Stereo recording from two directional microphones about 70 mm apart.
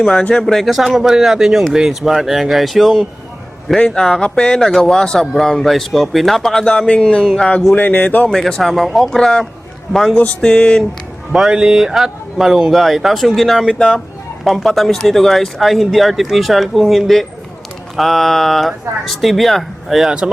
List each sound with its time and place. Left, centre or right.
0.0 s speech: centre
3.8 s speech: centre
7.7 s speech: left
8.3 s speech: centre
11.3 s speech: centre
13.7 s speech: centre
14.4 s speech: centre